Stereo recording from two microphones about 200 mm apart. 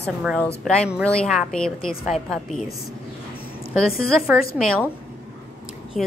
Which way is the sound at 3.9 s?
Centre (ahead or behind).